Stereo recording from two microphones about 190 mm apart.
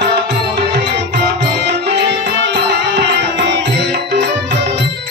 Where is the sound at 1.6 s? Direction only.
65° right (ahead or behind).